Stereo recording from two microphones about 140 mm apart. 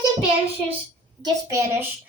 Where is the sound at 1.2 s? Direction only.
20° right (ahead or behind).